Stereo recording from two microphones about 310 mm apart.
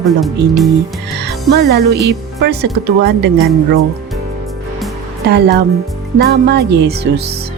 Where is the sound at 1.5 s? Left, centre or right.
Right.